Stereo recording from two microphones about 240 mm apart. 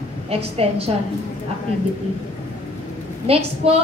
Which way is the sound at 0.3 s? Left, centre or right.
Right.